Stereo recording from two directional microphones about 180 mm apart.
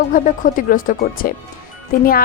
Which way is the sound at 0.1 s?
50° left (ahead or behind).